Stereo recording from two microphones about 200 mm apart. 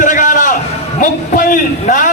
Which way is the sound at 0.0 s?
40° left (ahead or behind).